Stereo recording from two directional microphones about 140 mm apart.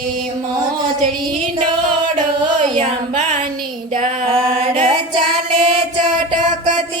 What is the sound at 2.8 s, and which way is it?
Music, 60° right (ahead or behind).